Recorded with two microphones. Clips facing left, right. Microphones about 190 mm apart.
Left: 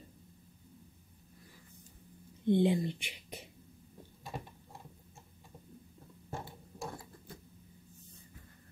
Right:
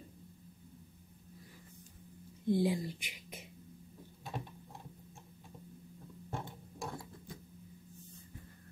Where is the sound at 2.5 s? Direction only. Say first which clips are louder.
Left 4 dB; 25° left (ahead or behind).